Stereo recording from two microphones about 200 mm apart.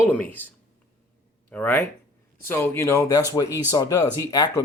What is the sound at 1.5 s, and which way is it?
Speech, 10° left (ahead or behind).